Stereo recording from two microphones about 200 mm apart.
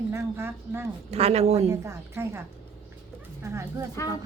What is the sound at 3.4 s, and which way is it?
Speech, 15° right (ahead or behind).